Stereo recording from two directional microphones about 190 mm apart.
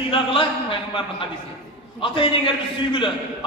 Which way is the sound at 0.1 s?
30° left (ahead or behind).